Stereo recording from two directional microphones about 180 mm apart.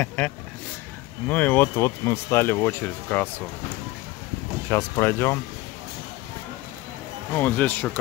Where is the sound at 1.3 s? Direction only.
10° left (ahead or behind).